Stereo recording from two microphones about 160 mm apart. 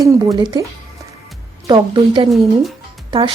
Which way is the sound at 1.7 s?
30° right (ahead or behind).